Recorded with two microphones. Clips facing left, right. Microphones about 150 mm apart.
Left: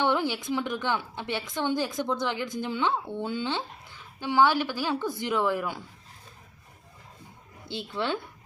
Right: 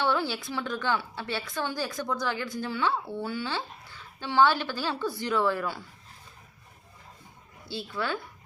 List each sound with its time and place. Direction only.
0.0 s a woman's voice: 20° left (ahead or behind)
7.7 s a woman's voice: 20° left (ahead or behind)